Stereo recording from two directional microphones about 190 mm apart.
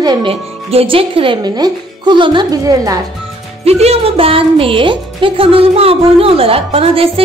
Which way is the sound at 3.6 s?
35° right (ahead or behind).